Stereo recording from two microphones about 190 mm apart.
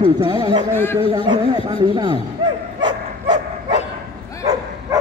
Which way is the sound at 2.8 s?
25° right (ahead or behind).